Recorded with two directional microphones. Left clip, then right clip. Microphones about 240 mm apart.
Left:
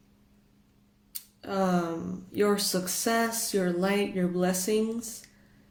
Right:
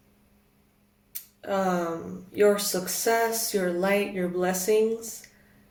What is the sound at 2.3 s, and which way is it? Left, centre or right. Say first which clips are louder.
Speech: right 4 dB; left.